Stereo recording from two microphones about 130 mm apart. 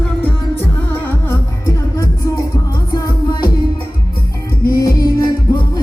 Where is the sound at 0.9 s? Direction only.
20° left (ahead or behind).